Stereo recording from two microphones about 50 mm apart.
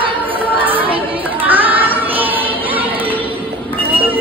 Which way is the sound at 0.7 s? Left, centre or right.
Right.